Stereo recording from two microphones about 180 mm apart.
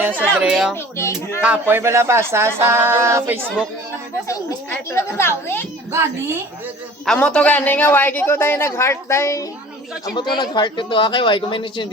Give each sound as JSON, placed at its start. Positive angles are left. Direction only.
{"t": 0.2, "sound": "speech", "side_deg": -5}
{"t": 0.7, "sound": "a man's voice", "side_deg": 15}
{"t": 1.4, "sound": "speech", "side_deg": -10}
{"t": 4.3, "sound": "a man's voice", "side_deg": 15}
{"t": 5.9, "sound": "speech", "side_deg": -15}
{"t": 7.0, "sound": "a man's voice", "side_deg": 5}